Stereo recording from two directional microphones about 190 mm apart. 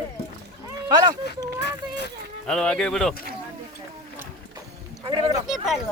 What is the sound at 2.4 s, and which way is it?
Speech, 5° left (ahead or behind).